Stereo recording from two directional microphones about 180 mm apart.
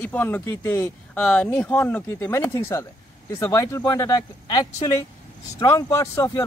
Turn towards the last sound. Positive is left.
turn(degrees=15)  # may be behind; listen again after turning